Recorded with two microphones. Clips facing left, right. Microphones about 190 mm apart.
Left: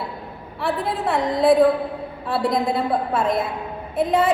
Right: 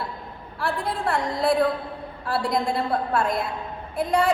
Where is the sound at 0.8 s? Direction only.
Centre (ahead or behind).